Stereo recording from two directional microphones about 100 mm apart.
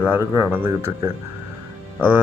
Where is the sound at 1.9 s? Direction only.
15° right (ahead or behind).